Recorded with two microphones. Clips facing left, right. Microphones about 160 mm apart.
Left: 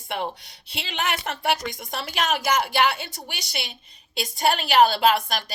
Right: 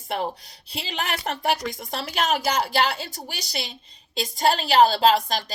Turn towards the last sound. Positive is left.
turn(degrees=-35)  # may be behind; listen again after turning